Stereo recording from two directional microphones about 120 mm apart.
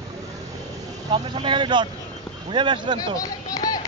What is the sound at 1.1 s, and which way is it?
Speech, 40° right (ahead or behind).